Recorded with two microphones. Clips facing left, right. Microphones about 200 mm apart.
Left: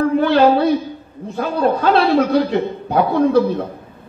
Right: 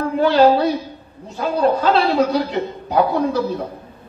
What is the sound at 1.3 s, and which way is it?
A man's voice, 55° left (ahead or behind).